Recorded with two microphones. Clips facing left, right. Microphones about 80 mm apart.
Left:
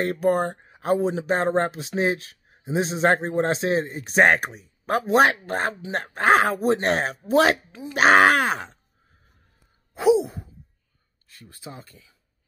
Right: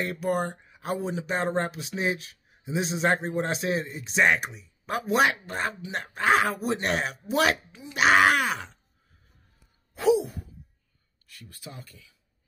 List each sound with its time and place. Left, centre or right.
0.0 s speech: left
4.0 s speech: left
9.9 s sigh: left
11.2 s speech: left